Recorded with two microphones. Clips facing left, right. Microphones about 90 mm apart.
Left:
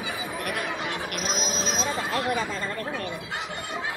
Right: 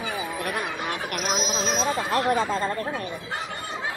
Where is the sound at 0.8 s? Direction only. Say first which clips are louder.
Right 2 dB; 50° right (ahead or behind).